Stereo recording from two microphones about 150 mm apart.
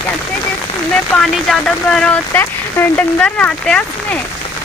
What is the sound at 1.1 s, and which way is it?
Speech, 5° left (ahead or behind).